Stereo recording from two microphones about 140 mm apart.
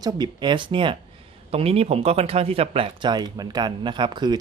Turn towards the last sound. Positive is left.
turn(degrees=-30)  # may be behind; listen again after turning